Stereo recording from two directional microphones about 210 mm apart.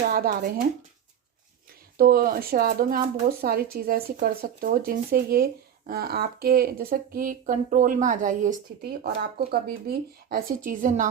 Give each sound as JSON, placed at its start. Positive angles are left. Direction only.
{"t": 0.1, "sound": "speech", "side_deg": -45}
{"t": 2.0, "sound": "speech", "side_deg": -45}